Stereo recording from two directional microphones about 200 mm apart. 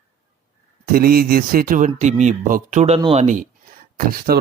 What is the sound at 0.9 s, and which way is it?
Speech, 45° right (ahead or behind).